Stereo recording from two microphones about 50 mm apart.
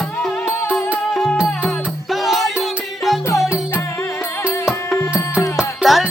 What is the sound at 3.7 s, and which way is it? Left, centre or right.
Music, left.